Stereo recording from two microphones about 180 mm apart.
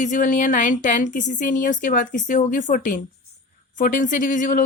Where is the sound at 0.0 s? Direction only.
45° left (ahead or behind).